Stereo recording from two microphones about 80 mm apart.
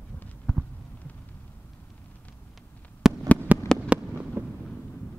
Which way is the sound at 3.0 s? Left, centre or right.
Centre.